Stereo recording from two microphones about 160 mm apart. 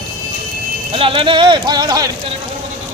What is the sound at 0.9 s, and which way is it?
Speech, 35° right (ahead or behind).